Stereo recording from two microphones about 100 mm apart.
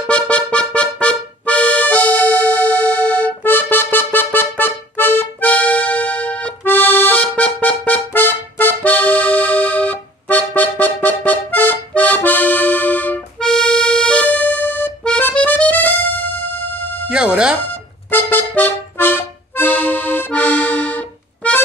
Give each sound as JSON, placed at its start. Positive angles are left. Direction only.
{"t": 0.1, "sound": "accordion", "side_deg": 15}
{"t": 13.4, "sound": "music", "side_deg": 5}
{"t": 17.1, "sound": "music", "side_deg": -10}
{"t": 18.1, "sound": "accordion", "side_deg": 20}